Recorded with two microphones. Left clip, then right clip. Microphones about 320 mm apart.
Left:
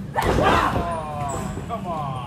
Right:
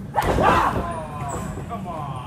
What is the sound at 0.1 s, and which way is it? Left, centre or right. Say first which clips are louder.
Dog: right 1 dB; centre.